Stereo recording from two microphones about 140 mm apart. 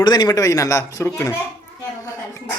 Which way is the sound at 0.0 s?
30° left (ahead or behind).